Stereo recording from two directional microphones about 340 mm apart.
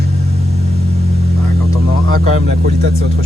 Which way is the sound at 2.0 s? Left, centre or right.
Right.